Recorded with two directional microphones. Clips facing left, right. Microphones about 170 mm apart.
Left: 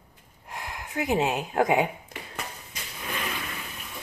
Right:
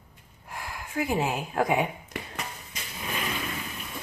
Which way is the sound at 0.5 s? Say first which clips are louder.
Left 1 dB; 20° left (ahead or behind).